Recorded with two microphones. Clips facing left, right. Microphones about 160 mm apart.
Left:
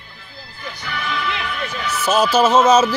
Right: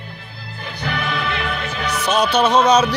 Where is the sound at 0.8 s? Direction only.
65° right (ahead or behind).